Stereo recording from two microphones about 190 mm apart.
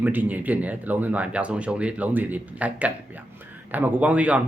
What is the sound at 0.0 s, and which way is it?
Speech, 10° right (ahead or behind).